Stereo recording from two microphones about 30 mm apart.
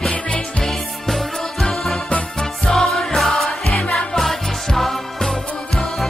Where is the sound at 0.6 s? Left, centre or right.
Centre.